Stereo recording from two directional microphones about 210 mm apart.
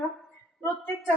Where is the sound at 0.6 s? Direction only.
10° left (ahead or behind).